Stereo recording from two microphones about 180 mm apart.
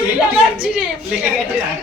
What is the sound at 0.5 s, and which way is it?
Speech, 5° right (ahead or behind).